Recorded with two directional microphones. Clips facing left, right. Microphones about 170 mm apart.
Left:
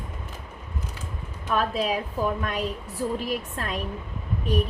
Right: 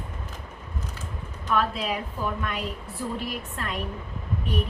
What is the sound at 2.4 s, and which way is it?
A woman's voice, 40° left (ahead or behind).